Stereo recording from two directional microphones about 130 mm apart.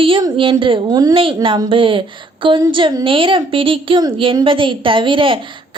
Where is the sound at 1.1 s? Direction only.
40° right (ahead or behind).